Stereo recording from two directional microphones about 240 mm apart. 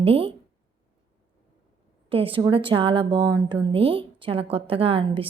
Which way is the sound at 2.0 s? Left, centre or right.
Right.